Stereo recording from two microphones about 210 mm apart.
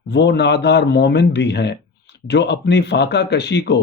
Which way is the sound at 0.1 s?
55° left (ahead or behind).